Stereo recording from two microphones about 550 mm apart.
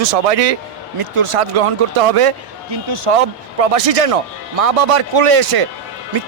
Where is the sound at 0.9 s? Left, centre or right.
Right.